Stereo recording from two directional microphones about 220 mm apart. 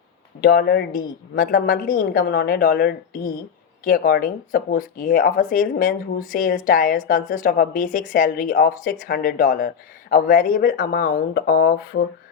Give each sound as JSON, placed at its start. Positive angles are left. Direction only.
{"t": 0.4, "sound": "a woman's voice", "side_deg": 45}